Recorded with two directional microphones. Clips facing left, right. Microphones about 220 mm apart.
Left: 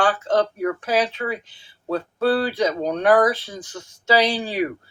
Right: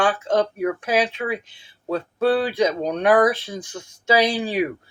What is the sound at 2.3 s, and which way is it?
Speech, 15° right (ahead or behind).